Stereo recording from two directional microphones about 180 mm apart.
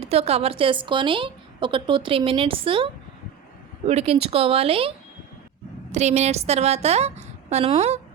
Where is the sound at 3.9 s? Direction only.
35° right (ahead or behind).